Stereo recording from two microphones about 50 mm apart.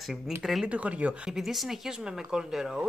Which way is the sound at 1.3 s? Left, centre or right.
Centre.